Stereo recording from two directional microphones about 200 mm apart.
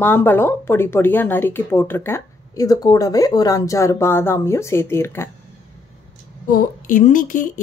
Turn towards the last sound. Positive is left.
turn(degrees=40)  # may be behind; listen again after turning